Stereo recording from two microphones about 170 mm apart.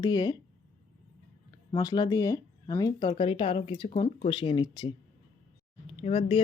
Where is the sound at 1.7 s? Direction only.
25° left (ahead or behind).